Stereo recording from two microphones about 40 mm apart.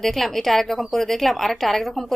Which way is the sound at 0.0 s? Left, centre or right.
Centre.